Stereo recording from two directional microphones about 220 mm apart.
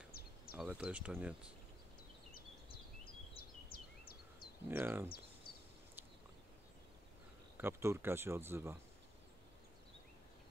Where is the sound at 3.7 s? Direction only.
40° left (ahead or behind).